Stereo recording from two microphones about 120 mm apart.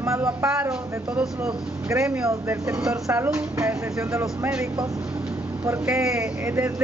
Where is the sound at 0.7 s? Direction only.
5° right (ahead or behind).